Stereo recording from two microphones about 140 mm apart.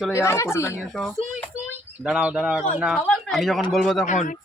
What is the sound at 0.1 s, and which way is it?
Speech, 20° left (ahead or behind).